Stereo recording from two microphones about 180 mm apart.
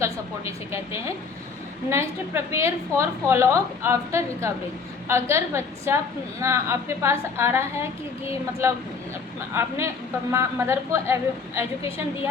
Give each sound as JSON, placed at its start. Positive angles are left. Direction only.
{"t": 0.0, "sound": "a woman's voice", "side_deg": -15}